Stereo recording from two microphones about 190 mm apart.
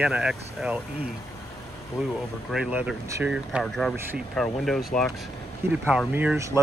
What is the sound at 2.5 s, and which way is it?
Speech, 5° right (ahead or behind).